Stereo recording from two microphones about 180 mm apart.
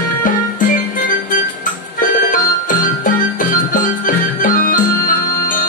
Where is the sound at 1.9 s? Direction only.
45° left (ahead or behind).